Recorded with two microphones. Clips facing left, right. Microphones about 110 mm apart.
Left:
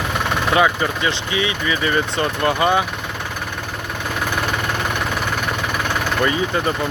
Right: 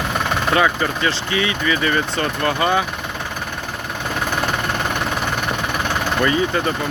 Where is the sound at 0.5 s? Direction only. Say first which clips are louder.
Left 1 dB; 15° left (ahead or behind).